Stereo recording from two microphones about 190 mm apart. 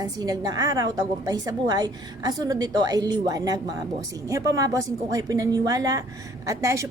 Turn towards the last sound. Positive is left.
turn(degrees=-15)  # may be behind; listen again after turning